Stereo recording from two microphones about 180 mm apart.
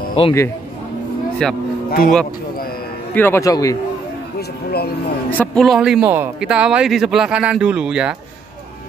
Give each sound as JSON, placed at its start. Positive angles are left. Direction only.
{"t": 0.2, "sound": "speech", "side_deg": 35}
{"t": 1.4, "sound": "speech", "side_deg": 5}
{"t": 1.9, "sound": "speech", "side_deg": 55}
{"t": 3.2, "sound": "speech", "side_deg": 15}
{"t": 4.4, "sound": "music", "side_deg": 60}
{"t": 5.4, "sound": "speech", "side_deg": 5}